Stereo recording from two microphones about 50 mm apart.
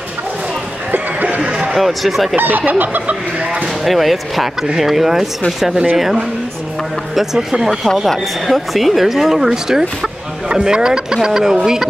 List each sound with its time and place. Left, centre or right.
0.9 s a sound: right
1.8 s speech: centre
2.3 s chicken: right
3.8 s speech: centre
7.2 s speech: centre